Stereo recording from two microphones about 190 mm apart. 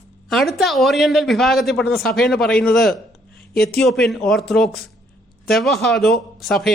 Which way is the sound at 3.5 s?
55° left (ahead or behind).